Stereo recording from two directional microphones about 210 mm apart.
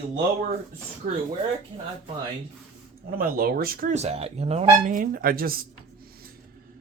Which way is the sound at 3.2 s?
45° right (ahead or behind).